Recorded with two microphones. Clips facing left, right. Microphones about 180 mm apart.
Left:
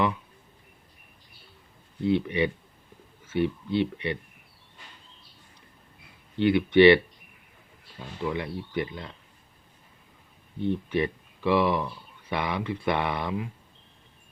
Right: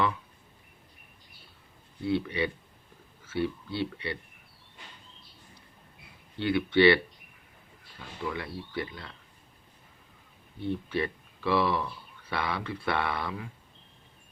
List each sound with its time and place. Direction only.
2.0 s speech: 20° left (ahead or behind)
6.4 s speech: 20° left (ahead or behind)
8.2 s speech: 20° left (ahead or behind)
10.6 s speech: 15° left (ahead or behind)